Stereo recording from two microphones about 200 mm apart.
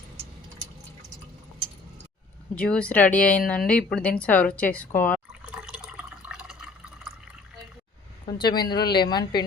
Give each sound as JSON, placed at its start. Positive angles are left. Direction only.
{"t": 2.6, "sound": "speech", "side_deg": 5}
{"t": 5.6, "sound": "drip", "side_deg": -5}
{"t": 8.3, "sound": "a woman's voice", "side_deg": 20}